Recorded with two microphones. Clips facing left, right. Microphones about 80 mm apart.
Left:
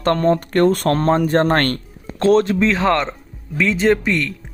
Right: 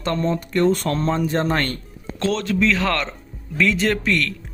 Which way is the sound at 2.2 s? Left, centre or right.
Left.